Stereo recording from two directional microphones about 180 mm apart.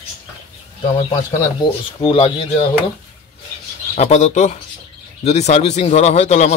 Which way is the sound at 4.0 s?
40° left (ahead or behind).